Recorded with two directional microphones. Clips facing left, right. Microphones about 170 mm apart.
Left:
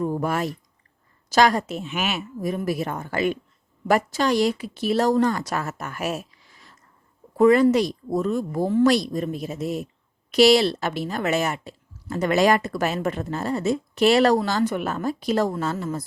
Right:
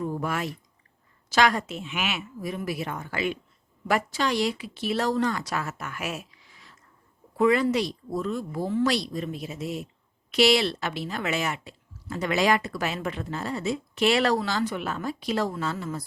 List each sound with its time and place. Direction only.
0.0 s a woman's voice: 45° left (ahead or behind)